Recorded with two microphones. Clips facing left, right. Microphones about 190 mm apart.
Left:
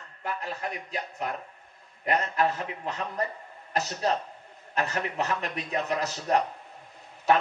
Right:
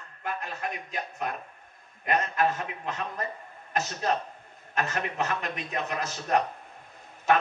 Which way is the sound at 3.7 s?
35° left (ahead or behind).